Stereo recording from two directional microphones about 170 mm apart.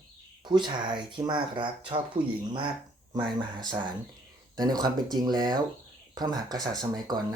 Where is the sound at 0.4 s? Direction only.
25° right (ahead or behind).